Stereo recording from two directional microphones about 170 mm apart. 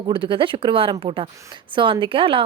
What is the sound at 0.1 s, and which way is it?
Speech, 30° right (ahead or behind).